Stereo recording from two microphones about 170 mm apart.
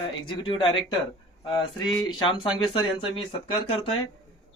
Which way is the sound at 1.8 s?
30° left (ahead or behind).